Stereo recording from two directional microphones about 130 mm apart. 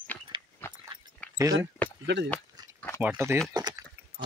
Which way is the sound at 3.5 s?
30° right (ahead or behind).